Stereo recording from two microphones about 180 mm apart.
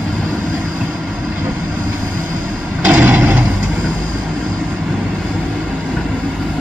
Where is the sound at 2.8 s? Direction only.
10° right (ahead or behind).